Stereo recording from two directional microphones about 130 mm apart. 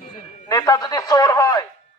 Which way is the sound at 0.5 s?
25° left (ahead or behind).